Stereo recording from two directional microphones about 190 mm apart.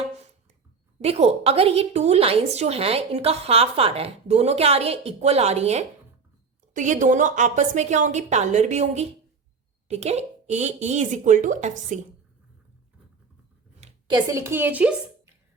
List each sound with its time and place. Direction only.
1.0 s a woman's voice: 35° right (ahead or behind)
14.1 s a woman's voice: 15° right (ahead or behind)